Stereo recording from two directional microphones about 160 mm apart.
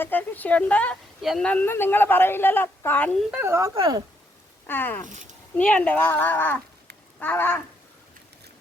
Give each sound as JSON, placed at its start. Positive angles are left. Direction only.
{"t": 0.0, "sound": "a woman's voice", "side_deg": 10}
{"t": 3.4, "sound": "speech", "side_deg": -15}
{"t": 4.6, "sound": "a woman's voice", "side_deg": 10}
{"t": 5.0, "sound": "speech", "side_deg": -50}
{"t": 5.5, "sound": "a woman's voice", "side_deg": 5}